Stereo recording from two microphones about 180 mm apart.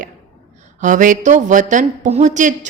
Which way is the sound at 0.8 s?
45° right (ahead or behind).